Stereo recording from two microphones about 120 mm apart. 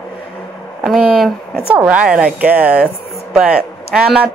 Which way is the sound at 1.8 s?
10° right (ahead or behind).